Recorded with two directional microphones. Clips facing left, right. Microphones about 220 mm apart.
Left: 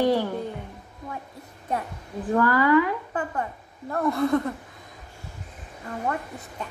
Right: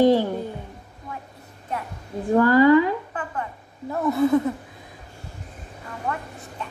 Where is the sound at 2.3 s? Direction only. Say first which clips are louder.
Right 5 dB; 30° right (ahead or behind).